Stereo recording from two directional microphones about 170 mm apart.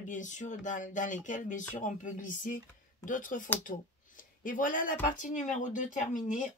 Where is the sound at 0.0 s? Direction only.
50° left (ahead or behind).